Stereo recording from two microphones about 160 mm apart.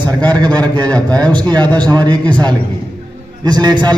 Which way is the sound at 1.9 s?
25° right (ahead or behind).